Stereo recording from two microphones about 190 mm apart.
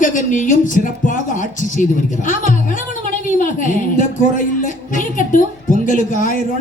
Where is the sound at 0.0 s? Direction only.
40° left (ahead or behind).